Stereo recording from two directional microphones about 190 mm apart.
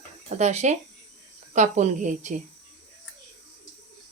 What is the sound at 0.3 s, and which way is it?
Speech, 35° right (ahead or behind).